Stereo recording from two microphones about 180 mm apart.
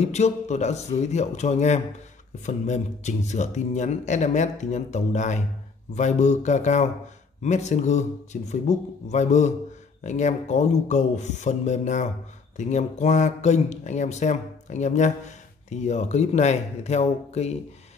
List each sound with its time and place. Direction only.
0.0 s speech: 40° left (ahead or behind)